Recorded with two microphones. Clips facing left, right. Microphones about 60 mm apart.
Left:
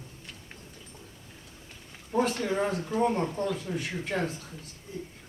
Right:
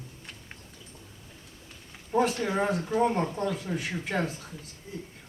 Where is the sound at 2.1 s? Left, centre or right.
Centre.